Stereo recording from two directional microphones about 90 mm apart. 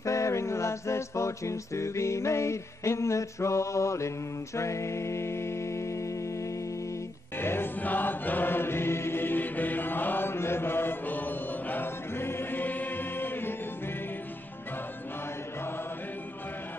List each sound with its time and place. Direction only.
0.0 s a capella: 35° left (ahead or behind)
4.6 s music: 35° left (ahead or behind)